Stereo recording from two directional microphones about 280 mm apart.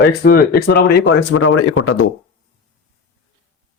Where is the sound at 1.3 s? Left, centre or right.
Left.